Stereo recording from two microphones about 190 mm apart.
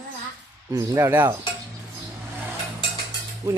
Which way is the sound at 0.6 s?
15° right (ahead or behind).